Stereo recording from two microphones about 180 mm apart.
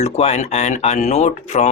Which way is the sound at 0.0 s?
35° left (ahead or behind).